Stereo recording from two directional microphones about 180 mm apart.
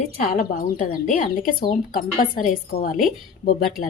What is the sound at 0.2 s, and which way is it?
A woman's voice, 50° left (ahead or behind).